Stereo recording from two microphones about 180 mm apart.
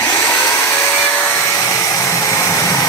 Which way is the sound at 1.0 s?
10° left (ahead or behind).